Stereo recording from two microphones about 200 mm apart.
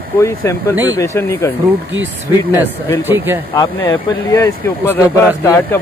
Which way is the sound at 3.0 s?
10° right (ahead or behind).